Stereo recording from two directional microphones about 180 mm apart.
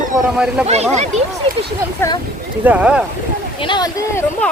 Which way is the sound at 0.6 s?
35° right (ahead or behind).